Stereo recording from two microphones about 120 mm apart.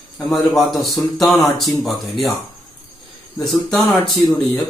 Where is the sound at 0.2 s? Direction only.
Centre (ahead or behind).